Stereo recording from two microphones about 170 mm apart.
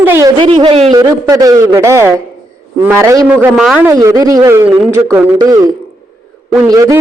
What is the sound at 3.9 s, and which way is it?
Speech, 20° right (ahead or behind).